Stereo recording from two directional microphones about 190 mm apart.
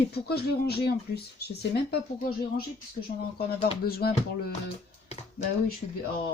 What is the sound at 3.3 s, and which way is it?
Speech, 55° left (ahead or behind).